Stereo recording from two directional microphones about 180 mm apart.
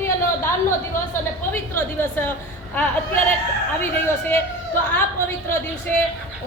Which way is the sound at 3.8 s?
10° left (ahead or behind).